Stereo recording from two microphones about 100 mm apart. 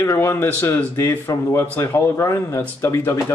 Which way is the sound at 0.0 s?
25° left (ahead or behind).